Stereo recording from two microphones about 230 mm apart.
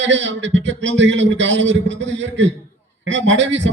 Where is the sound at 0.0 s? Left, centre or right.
Right.